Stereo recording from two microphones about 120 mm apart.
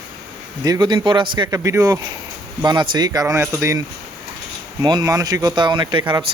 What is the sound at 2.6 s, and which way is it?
Speech, 40° right (ahead or behind).